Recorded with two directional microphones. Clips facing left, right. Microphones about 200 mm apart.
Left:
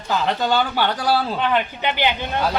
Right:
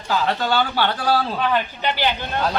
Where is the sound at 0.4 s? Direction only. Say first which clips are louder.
Left 1 dB; 15° left (ahead or behind).